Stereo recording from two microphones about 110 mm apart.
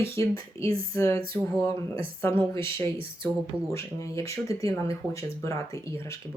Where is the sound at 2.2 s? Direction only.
20° left (ahead or behind).